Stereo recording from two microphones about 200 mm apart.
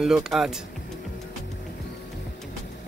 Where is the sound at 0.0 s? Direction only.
Centre (ahead or behind).